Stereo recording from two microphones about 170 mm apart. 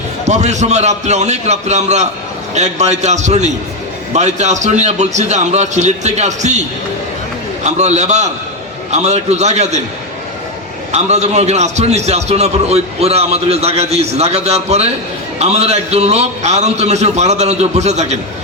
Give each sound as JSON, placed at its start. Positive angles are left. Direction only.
{"t": 0.3, "sound": "a man's voice", "side_deg": -45}
{"t": 10.9, "sound": "a man's voice", "side_deg": -40}